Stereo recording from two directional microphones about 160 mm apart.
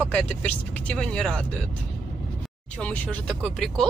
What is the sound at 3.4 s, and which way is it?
Speech, 5° left (ahead or behind).